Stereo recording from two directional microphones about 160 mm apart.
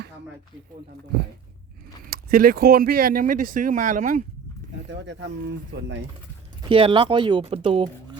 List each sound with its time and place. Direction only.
2.0 s speech: 70° right (ahead or behind); by 4.2 s 50° right (ahead or behind)
4.9 s speech: 90° right
6.7 s speech: 35° right (ahead or behind)